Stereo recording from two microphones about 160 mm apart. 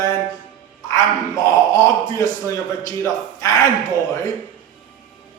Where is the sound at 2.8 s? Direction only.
20° left (ahead or behind).